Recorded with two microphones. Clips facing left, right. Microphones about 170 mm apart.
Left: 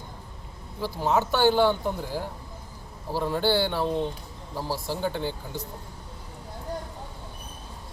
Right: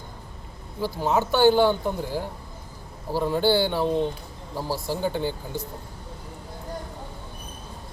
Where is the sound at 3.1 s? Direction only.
10° right (ahead or behind).